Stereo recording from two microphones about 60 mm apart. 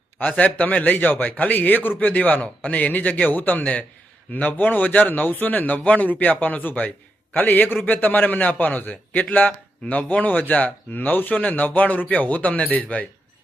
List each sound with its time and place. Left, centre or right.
0.2 s a man's voice: left